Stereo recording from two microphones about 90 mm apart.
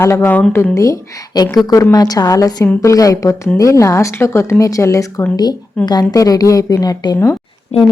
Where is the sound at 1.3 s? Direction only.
50° left (ahead or behind).